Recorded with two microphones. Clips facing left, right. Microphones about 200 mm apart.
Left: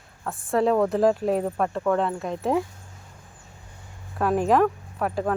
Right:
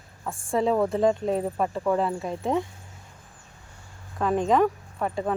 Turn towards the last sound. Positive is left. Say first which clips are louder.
# left 2 dB
turn(degrees=0)  # may be behind; listen again after turning